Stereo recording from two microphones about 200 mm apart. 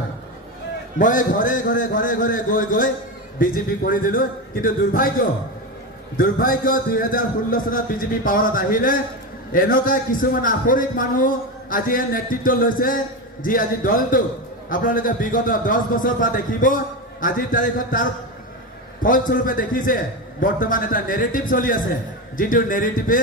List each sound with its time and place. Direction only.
0.9 s a man's voice: 40° left (ahead or behind)
19.0 s a man's voice: 45° left (ahead or behind)